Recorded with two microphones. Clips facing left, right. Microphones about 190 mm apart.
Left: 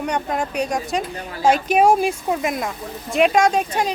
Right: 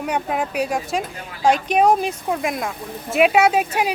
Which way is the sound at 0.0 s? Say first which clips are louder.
Even; 5° right (ahead or behind).